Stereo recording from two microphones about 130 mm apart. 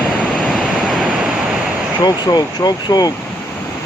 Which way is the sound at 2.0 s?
30° left (ahead or behind).